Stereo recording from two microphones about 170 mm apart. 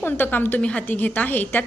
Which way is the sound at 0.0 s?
10° left (ahead or behind).